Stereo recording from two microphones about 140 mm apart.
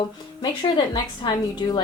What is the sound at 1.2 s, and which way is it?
Speech, 30° left (ahead or behind).